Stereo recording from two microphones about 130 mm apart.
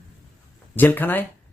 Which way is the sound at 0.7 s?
15° left (ahead or behind).